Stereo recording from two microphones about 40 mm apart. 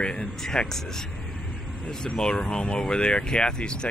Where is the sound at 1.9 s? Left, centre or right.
Centre.